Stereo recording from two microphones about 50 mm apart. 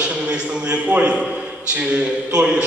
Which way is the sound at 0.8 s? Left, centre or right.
Right.